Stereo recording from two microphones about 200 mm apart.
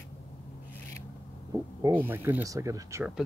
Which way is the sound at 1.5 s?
15° right (ahead or behind).